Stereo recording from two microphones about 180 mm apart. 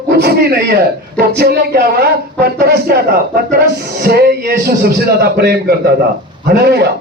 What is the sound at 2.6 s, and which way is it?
Speech, 60° right (ahead or behind).